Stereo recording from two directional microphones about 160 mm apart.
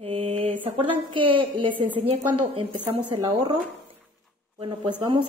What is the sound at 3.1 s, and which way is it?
Speech, 35° right (ahead or behind).